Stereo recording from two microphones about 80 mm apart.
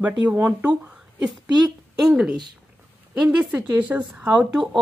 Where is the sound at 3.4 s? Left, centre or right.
Centre.